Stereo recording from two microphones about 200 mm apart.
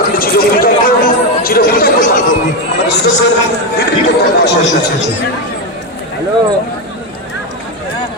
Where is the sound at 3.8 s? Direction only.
55° left (ahead or behind).